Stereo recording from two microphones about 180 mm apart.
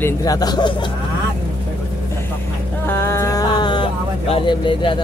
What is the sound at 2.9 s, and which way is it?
Vehicle, 15° left (ahead or behind).